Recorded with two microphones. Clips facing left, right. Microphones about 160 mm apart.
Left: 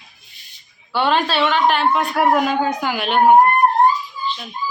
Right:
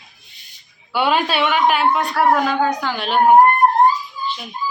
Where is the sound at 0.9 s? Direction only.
10° right (ahead or behind).